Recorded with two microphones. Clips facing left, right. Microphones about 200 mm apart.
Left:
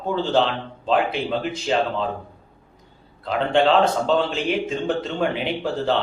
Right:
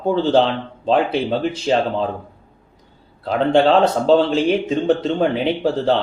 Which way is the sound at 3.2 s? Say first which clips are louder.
Right 4 dB; 35° right (ahead or behind).